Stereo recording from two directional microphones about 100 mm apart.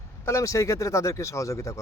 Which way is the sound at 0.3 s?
30° left (ahead or behind).